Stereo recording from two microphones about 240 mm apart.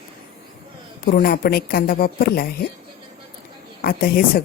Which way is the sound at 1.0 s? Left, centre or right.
Left.